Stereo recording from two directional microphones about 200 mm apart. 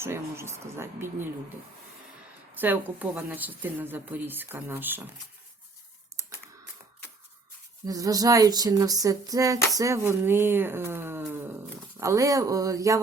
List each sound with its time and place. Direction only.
0.0 s speech: 15° right (ahead or behind)
2.6 s speech: 10° right (ahead or behind)
7.9 s speech: 20° right (ahead or behind)